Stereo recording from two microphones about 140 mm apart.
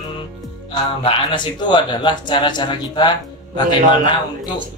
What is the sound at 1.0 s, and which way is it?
Speech, 35° left (ahead or behind).